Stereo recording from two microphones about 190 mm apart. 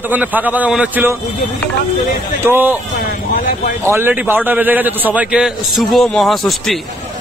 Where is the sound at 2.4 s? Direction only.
10° right (ahead or behind).